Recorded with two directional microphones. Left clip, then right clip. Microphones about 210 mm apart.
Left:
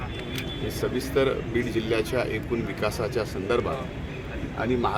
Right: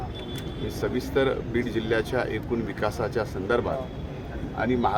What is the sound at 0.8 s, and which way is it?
Speech, 5° right (ahead or behind).